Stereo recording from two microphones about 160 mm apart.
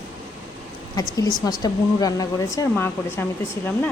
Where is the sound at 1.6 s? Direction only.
25° left (ahead or behind).